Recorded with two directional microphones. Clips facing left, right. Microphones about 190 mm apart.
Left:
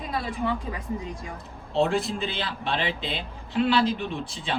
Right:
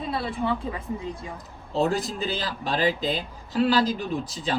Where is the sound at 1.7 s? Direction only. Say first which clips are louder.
Left 1 dB; 40° right (ahead or behind).